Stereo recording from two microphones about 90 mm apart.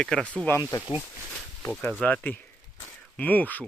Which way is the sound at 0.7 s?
45° left (ahead or behind).